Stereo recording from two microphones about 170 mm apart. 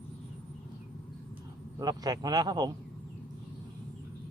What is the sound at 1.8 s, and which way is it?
Speech, 25° right (ahead or behind).